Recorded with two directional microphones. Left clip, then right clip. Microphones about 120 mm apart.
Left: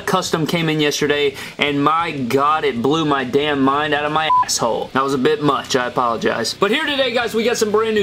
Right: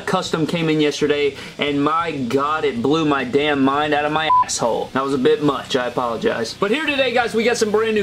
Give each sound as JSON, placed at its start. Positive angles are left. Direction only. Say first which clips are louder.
{"t": 0.7, "sound": "speech", "louder": "right 1 dB", "side_deg": 40}
{"t": 2.9, "sound": "speech", "louder": "even", "side_deg": 25}
{"t": 4.9, "sound": "speech", "louder": "even", "side_deg": 40}
{"t": 6.9, "sound": "speech", "louder": "even", "side_deg": 15}